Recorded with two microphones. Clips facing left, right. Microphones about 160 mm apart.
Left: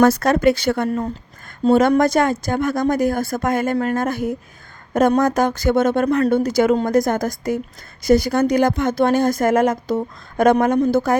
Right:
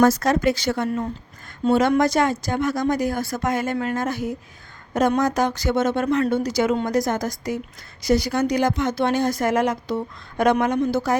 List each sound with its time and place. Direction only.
0.0 s a woman's voice: 60° left (ahead or behind)
1.6 s a woman's voice: 45° left (ahead or behind)